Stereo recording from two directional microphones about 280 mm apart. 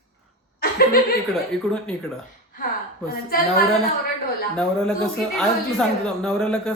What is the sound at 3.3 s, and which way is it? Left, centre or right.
Speech, left.